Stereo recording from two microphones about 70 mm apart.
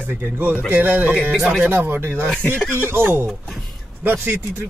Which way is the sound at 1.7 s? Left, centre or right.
Right.